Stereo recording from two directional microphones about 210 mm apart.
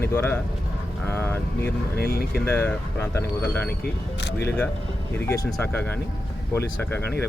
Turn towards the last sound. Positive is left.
turn(degrees=10)  # may be behind; listen again after turning